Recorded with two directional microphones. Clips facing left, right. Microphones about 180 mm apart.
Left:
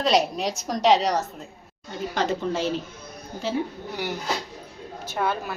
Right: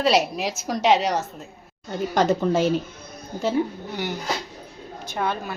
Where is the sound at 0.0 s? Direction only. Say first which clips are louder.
Right 1 dB; 5° right (ahead or behind).